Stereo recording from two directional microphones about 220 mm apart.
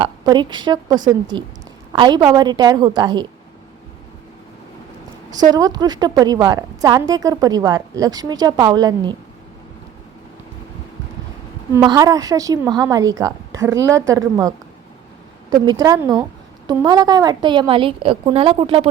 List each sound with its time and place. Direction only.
0.0 s a woman's voice: 20° right (ahead or behind)
5.5 s a woman's voice: 15° right (ahead or behind)
11.7 s a woman's voice: 15° right (ahead or behind)
15.6 s a woman's voice: 15° right (ahead or behind)